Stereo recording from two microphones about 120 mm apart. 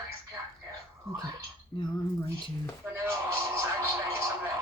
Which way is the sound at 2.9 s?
20° right (ahead or behind).